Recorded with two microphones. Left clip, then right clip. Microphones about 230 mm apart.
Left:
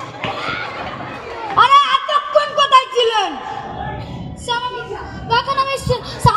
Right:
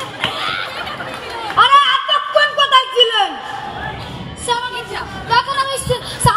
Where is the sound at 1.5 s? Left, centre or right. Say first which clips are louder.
Even; left.